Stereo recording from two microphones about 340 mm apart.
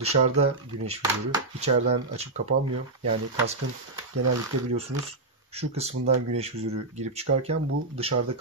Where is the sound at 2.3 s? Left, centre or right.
Right.